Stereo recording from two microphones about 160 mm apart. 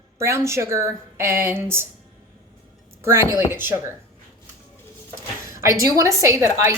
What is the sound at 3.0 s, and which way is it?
Speech, 15° right (ahead or behind).